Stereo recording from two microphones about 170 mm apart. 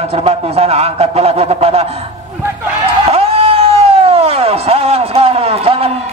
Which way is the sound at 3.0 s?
35° right (ahead or behind).